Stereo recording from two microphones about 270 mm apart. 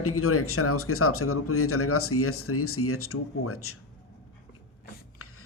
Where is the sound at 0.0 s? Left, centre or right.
Left.